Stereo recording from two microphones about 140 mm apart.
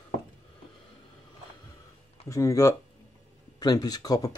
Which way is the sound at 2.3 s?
20° left (ahead or behind).